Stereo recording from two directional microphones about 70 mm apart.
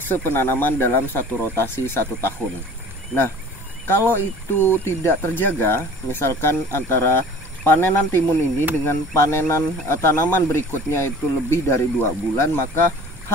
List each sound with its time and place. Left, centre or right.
0.1 s speech: left
3.8 s speech: left